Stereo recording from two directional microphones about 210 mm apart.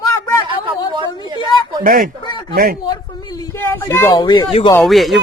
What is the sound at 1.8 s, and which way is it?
Speech, 40° right (ahead or behind).